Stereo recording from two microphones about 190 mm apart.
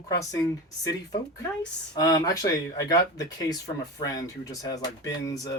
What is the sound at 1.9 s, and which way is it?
Speech, 20° left (ahead or behind).